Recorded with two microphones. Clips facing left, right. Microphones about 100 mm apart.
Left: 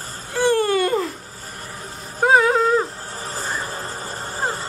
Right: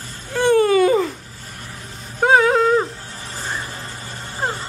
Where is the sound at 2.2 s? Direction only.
Centre (ahead or behind).